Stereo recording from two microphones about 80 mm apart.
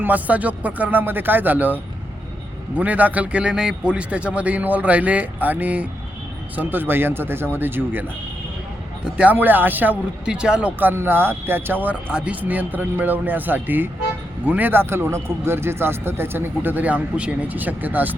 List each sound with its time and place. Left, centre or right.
0.0 s a man's voice: centre
9.0 s a man's voice: centre
10.2 s speech: centre
10.8 s a man's voice: right